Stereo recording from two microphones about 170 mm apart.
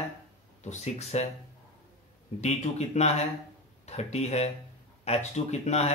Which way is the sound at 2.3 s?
40° left (ahead or behind).